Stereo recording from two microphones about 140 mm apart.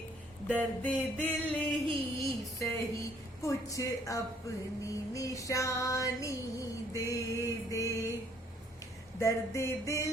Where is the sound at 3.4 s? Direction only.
25° left (ahead or behind).